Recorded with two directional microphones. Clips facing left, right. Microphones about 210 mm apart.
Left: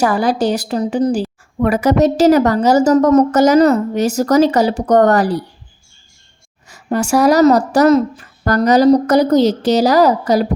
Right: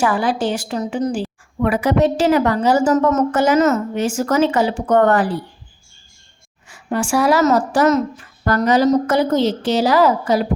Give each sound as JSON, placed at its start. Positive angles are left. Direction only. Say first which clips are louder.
{"t": 0.0, "sound": "a woman's voice", "louder": "left 3 dB", "side_deg": 40}
{"t": 6.7, "sound": "a woman's voice", "louder": "left 4 dB", "side_deg": 40}